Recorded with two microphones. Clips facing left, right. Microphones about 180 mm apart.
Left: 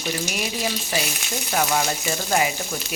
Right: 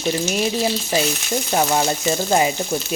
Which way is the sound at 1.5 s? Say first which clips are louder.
Right 3 dB; 25° right (ahead or behind).